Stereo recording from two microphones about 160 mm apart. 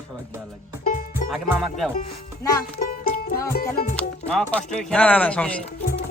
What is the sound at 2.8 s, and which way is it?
Music, 60° left (ahead or behind).